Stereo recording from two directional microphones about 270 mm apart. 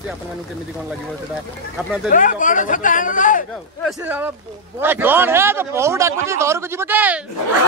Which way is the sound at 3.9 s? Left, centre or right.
Centre.